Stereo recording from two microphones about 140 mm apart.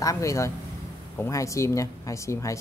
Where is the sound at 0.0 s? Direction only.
25° left (ahead or behind).